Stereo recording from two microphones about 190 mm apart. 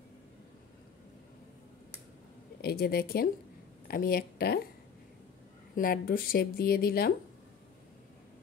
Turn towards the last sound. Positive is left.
turn(degrees=55)  # may be behind; listen again after turning